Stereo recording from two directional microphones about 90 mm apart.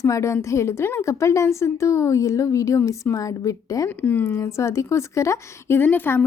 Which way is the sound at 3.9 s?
20° left (ahead or behind).